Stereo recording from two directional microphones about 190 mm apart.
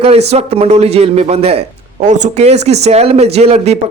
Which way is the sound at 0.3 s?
35° right (ahead or behind).